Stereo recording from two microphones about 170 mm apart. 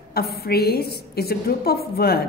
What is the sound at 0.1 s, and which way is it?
A woman's voice, 65° left (ahead or behind).